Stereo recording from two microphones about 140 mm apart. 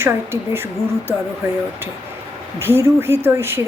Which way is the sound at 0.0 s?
15° right (ahead or behind).